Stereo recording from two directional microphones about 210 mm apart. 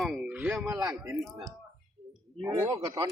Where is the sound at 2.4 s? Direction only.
15° right (ahead or behind).